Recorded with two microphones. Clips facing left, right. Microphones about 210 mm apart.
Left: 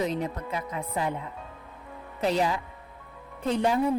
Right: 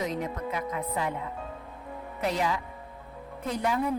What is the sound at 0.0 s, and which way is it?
Speech, 30° left (ahead or behind).